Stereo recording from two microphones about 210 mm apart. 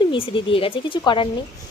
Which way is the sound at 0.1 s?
25° left (ahead or behind).